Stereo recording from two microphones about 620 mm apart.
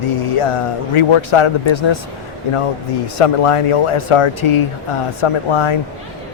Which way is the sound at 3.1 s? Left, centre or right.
Left.